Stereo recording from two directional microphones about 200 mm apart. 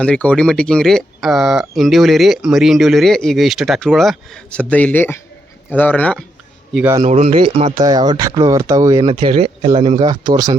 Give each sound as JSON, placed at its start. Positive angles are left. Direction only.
{"t": 0.0, "sound": "speech", "side_deg": 5}
{"t": 6.7, "sound": "speech", "side_deg": -10}
{"t": 7.0, "sound": "speech", "side_deg": -35}
{"t": 9.0, "sound": "speech", "side_deg": -25}
{"t": 10.0, "sound": "speech", "side_deg": -20}